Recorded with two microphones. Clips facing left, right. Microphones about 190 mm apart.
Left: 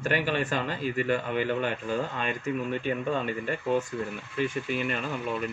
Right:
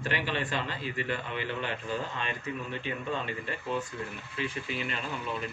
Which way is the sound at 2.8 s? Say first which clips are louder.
Left 6 dB; 50° left (ahead or behind).